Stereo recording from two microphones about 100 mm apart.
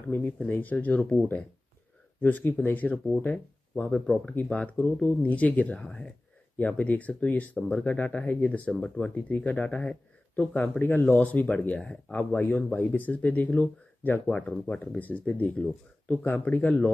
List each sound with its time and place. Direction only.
0.4 s speech: 15° left (ahead or behind)